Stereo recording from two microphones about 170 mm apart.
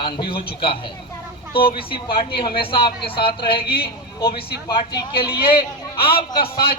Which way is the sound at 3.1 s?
65° left (ahead or behind).